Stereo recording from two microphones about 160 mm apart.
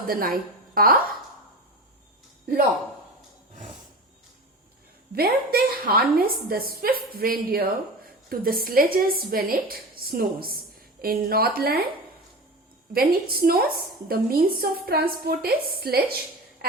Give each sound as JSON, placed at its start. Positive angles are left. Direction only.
{"t": 0.1, "sound": "a woman's voice", "side_deg": -65}
{"t": 5.1, "sound": "a woman's voice", "side_deg": -70}
{"t": 12.9, "sound": "a woman's voice", "side_deg": -70}